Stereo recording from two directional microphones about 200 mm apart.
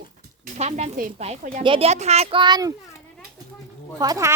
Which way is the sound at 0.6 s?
40° right (ahead or behind).